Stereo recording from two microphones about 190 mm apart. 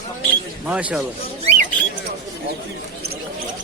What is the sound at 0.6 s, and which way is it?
Speech, 5° right (ahead or behind).